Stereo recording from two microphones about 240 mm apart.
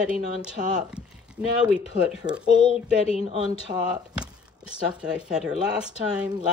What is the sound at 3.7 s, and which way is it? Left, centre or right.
Speech, right.